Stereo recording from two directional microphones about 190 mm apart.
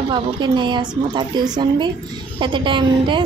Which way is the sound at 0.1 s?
25° right (ahead or behind).